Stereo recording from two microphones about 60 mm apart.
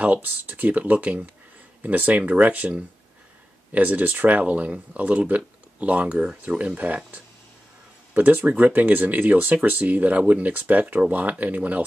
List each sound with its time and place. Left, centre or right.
0.0 s speech: right
8.1 s speech: right